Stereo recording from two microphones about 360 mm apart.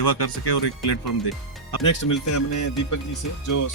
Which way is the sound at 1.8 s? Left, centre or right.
Left.